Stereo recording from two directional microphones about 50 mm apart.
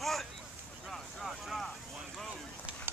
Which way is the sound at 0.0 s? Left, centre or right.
Centre.